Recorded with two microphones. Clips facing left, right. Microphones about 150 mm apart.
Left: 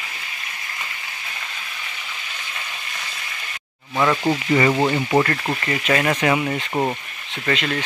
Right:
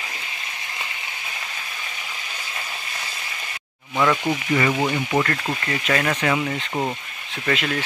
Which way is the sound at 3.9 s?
15° left (ahead or behind).